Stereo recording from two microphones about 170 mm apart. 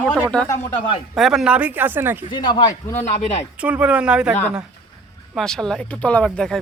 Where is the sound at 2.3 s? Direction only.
25° left (ahead or behind).